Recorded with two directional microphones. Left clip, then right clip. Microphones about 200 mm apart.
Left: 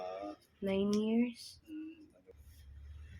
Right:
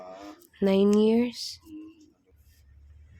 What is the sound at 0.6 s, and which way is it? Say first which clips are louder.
Speech: right 13 dB; 50° right (ahead or behind).